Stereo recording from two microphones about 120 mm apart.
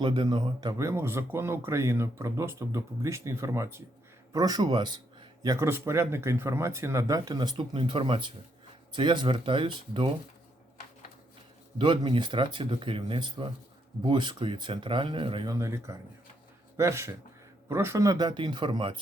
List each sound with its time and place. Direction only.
0.0 s speech: 45° right (ahead or behind)
5.5 s speech: 20° right (ahead or behind); by 10.1 s 40° right (ahead or behind)
11.8 s speech: 45° right (ahead or behind)
15.4 s speech: 25° right (ahead or behind); by 18.9 s 45° right (ahead or behind)